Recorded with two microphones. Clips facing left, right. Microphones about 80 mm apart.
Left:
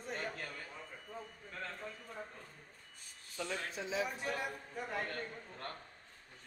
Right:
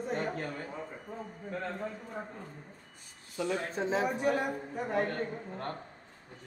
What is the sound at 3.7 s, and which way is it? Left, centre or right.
A man's voice, right.